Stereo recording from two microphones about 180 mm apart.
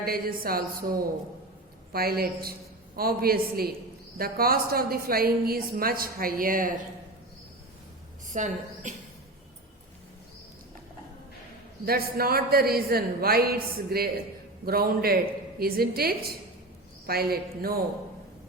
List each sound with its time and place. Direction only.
0.0 s a woman's voice: 55° right (ahead or behind)
8.3 s a woman's voice: 45° right (ahead or behind)
11.9 s a woman's voice: 55° right (ahead or behind)